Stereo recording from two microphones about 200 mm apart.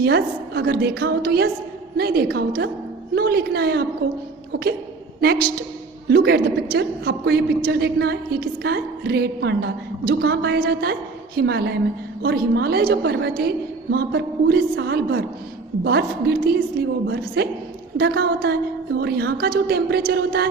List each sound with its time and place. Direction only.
0.0 s a woman's voice: 55° right (ahead or behind)